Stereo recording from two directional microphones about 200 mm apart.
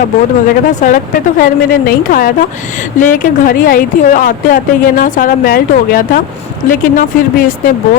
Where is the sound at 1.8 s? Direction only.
45° left (ahead or behind).